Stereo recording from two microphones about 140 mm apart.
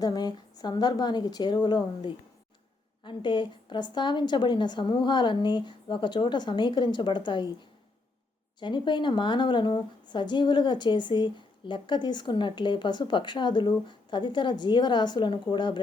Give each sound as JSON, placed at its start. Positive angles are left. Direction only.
{"t": 0.0, "sound": "a woman's voice", "side_deg": 30}
{"t": 3.0, "sound": "a woman's voice", "side_deg": 35}
{"t": 8.5, "sound": "a woman's voice", "side_deg": 35}